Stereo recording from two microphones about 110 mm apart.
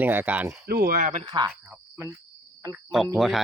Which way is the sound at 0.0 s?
15° right (ahead or behind).